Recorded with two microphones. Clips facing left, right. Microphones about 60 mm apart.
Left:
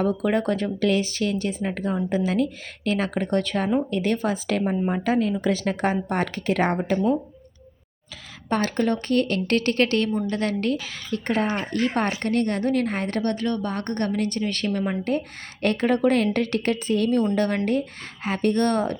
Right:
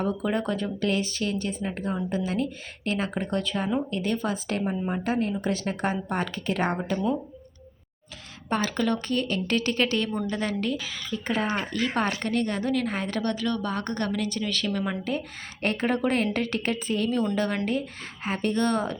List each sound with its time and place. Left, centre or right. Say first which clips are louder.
0.2 s speech: left 4 dB; left
3.3 s a woman's voice: left 5 dB; left
8.4 s a woman's voice: left 3 dB; left
11.1 s a woman's voice: left 4 dB; left
11.5 s a woman's voice: left 3 dB; left
14.7 s speech: left 4 dB; left
15.6 s a woman's voice: left 5 dB; left